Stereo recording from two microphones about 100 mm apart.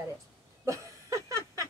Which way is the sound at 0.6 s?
30° right (ahead or behind).